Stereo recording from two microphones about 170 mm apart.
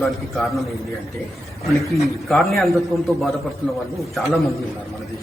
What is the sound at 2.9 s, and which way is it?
Speech, 20° right (ahead or behind).